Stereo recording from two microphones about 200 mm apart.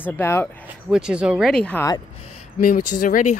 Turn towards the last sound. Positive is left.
turn(degrees=40)  # may be behind; listen again after turning